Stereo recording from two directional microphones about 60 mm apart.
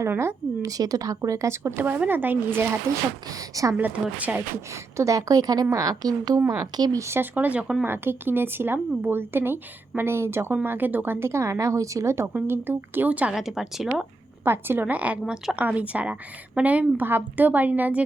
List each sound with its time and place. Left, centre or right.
0.6 s speech: right
1.8 s speech: right
3.2 s a woman's voice: right
3.8 s a woman's voice: right
4.7 s a woman's voice: right
6.5 s a woman's voice: right
7.3 s a woman's voice: right
12.3 s speech: right
13.1 s a woman's voice: right
13.3 s speech: centre
14.4 s speech: right
14.8 s a woman's voice: right